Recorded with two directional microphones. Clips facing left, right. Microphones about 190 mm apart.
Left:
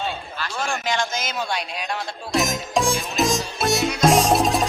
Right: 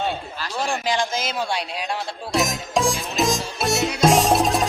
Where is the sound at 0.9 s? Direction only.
30° right (ahead or behind).